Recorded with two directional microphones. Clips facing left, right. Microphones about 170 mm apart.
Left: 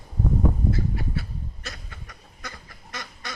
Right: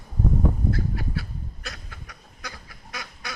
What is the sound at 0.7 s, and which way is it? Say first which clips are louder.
Goose: left 1 dB; centre (ahead or behind).